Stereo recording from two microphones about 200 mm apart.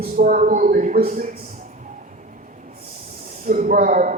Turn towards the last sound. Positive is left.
turn(degrees=-40)  # may be behind; listen again after turning